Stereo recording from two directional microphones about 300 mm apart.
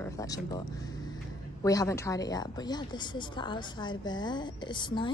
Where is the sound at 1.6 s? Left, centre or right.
Centre.